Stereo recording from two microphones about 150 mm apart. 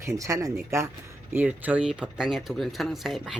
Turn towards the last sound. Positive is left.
turn(degrees=-5)  # may be behind; listen again after turning